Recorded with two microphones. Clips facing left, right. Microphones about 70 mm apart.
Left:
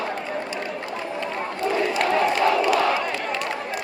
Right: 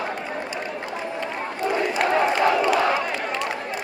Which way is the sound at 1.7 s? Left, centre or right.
Right.